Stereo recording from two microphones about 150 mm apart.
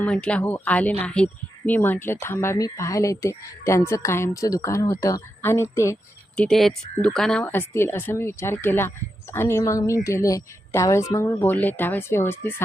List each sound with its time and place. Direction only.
0.0 s speech: 10° left (ahead or behind)
6.3 s speech: 5° left (ahead or behind)
7.4 s speech: 15° left (ahead or behind)